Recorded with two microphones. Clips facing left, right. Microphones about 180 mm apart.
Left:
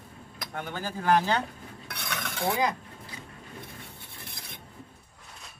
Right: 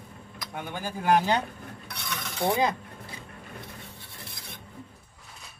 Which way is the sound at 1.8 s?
55° left (ahead or behind).